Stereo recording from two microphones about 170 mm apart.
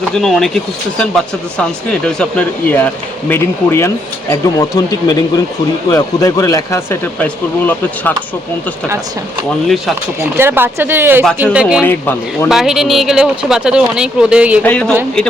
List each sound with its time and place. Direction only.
0.1 s speech: centre (ahead or behind)
10.3 s speech: 15° right (ahead or behind)
11.8 s speech: 15° left (ahead or behind)
12.5 s speech: 5° right (ahead or behind)
14.6 s speech: 5° left (ahead or behind)